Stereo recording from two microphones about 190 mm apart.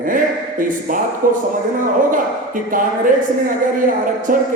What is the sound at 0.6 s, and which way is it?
Speech, 45° right (ahead or behind).